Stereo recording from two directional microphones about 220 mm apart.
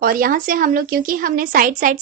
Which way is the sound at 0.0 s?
40° right (ahead or behind).